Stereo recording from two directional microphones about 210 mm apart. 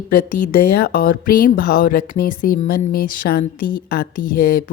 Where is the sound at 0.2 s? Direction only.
45° left (ahead or behind).